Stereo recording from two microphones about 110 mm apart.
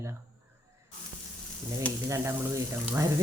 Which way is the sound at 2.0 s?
25° right (ahead or behind).